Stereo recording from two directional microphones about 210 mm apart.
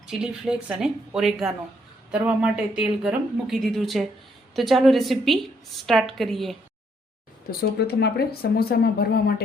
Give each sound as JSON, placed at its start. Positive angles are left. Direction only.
{"t": 0.1, "sound": "speech", "side_deg": -5}
{"t": 7.8, "sound": "speech", "side_deg": 50}